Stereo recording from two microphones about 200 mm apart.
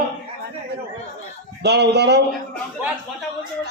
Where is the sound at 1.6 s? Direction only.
55° right (ahead or behind).